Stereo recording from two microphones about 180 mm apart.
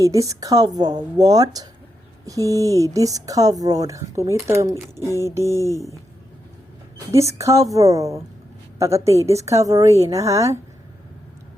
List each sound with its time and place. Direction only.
0.0 s a woman's voice: 20° right (ahead or behind)
7.1 s a woman's voice: 15° right (ahead or behind)